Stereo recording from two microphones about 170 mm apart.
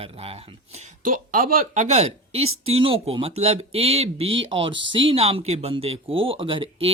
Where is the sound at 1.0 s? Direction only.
55° right (ahead or behind).